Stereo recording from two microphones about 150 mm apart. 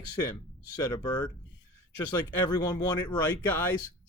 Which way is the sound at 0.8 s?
25° left (ahead or behind).